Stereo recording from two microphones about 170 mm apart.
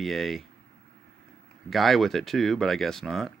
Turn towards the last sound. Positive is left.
turn(degrees=0)  # may be behind; listen again after turning